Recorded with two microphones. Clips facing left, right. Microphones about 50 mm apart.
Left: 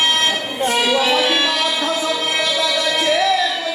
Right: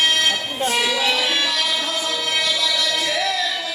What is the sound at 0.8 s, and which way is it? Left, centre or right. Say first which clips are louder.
Music: left 4 dB; left.